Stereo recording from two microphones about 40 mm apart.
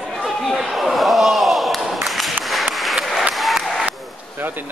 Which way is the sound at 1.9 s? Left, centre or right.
Centre.